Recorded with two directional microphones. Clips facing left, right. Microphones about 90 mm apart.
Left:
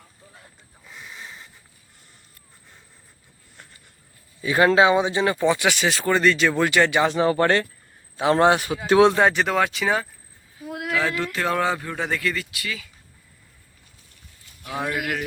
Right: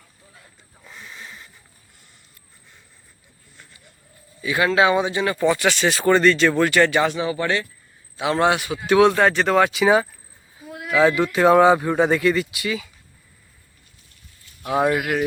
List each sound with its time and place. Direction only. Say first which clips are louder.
0.9 s a sound: right 1 dB; 5° left (ahead or behind)
1.1 s a sound: even; 20° left (ahead or behind)
4.4 s a man's voice: left 3 dB; 35° left (ahead or behind)
4.8 s speech: left 1 dB; 20° left (ahead or behind)
7.1 s speech: left 4 dB; 50° left (ahead or behind)
8.1 s a man's voice: left 2 dB; 40° left (ahead or behind)
9.1 s speech: right 2 dB; 10° left (ahead or behind); by 10.1 s 10° right (ahead or behind)
10.7 s a sound: left 3 dB; 70° left (ahead or behind)
10.9 s a man's voice: right 8 dB; 20° right (ahead or behind)
14.6 s speech: right 9 dB; 25° right (ahead or behind)
14.9 s speech: right 4 dB; 10° right (ahead or behind)